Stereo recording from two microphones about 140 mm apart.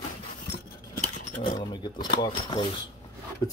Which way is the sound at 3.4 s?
25° left (ahead or behind).